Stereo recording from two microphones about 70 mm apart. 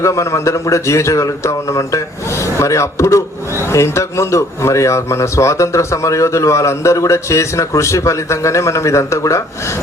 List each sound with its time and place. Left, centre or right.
0.0 s a man's voice: left